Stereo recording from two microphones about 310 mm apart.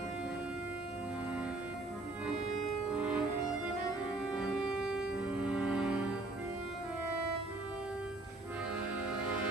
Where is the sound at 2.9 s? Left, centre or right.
Centre.